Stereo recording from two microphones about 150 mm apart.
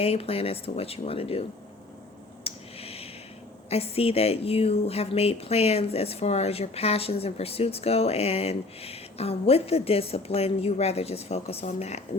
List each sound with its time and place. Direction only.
0.0 s speech: 40° left (ahead or behind)
2.4 s a sound: 40° left (ahead or behind)
3.7 s a woman's voice: 40° left (ahead or behind)